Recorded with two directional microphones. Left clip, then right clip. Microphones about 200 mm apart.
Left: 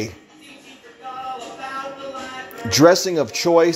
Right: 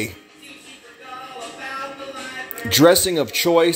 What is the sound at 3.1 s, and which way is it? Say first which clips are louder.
Speech: even; 10° right (ahead or behind).